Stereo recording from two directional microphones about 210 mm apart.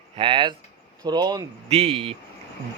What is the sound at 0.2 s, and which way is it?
Speech, 25° right (ahead or behind).